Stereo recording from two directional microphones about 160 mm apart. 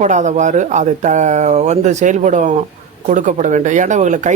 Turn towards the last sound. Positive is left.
turn(degrees=-50)  # may be behind; listen again after turning